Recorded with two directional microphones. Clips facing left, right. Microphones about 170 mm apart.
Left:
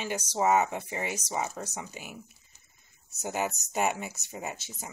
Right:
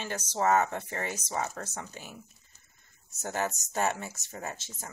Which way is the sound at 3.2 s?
10° left (ahead or behind).